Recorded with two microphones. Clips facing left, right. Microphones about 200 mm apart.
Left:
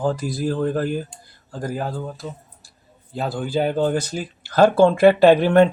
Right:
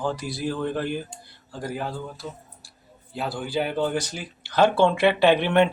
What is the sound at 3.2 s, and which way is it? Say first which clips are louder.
Speech: left 4 dB; 45° left (ahead or behind).